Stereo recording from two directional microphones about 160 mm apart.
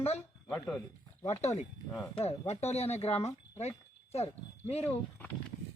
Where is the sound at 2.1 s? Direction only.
35° left (ahead or behind).